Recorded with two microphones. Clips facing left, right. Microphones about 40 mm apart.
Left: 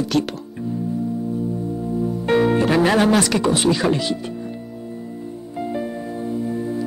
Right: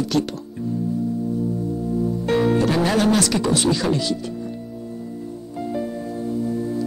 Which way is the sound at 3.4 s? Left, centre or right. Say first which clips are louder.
Left 2 dB; left.